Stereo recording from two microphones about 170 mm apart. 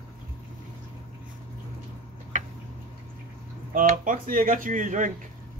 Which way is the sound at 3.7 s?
55° right (ahead or behind).